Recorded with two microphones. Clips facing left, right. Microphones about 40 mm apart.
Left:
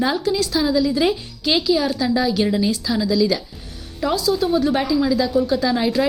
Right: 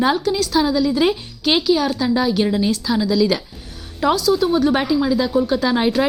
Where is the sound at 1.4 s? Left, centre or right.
Right.